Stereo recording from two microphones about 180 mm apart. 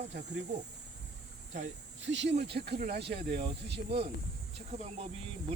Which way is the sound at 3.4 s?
30° right (ahead or behind).